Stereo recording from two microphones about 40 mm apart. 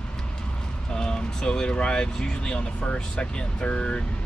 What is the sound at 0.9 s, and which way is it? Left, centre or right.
Speech, centre.